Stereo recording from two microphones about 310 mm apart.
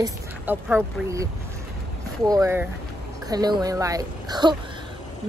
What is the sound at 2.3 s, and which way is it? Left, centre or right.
Speech, centre.